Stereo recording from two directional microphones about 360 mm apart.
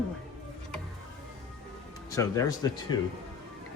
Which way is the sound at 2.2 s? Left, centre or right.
Centre.